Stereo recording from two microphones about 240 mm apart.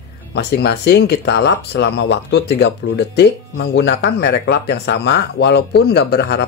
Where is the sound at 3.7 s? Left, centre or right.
Left.